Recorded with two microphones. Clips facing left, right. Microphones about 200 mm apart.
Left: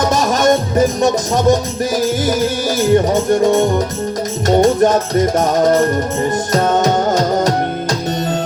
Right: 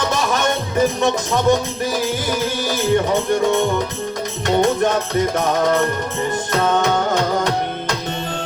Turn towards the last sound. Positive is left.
turn(degrees=40)  # may be behind; listen again after turning